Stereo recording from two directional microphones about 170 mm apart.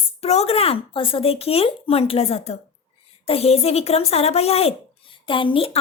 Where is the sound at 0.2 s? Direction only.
35° left (ahead or behind).